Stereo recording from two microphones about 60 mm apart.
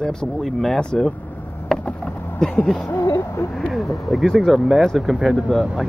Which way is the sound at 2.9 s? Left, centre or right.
Left.